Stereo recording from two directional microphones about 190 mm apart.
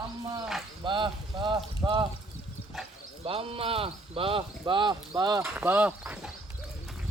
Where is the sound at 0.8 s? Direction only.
25° right (ahead or behind).